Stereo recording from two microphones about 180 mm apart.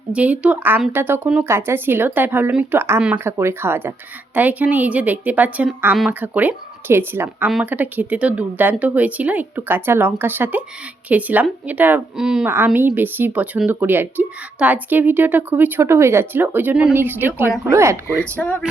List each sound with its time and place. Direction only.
0.1 s a woman's voice: 5° right (ahead or behind)
18.3 s speech: 10° left (ahead or behind)